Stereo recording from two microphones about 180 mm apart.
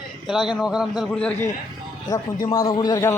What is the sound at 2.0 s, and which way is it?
A man's voice, 20° left (ahead or behind).